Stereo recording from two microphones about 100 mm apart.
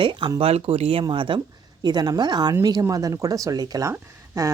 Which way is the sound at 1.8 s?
40° right (ahead or behind).